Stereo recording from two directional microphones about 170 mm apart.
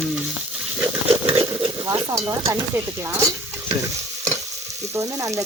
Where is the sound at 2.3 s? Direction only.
15° right (ahead or behind).